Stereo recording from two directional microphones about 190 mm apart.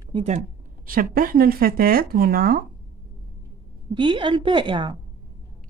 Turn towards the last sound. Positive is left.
turn(degrees=-25)  # may be behind; listen again after turning